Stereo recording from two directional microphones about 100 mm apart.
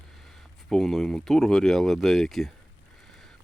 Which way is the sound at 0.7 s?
5° left (ahead or behind).